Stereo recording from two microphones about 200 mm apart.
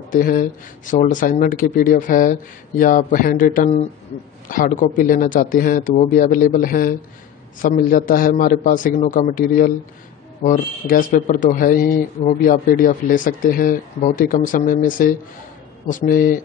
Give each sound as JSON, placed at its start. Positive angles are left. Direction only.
{"t": 0.1, "sound": "speech", "side_deg": 45}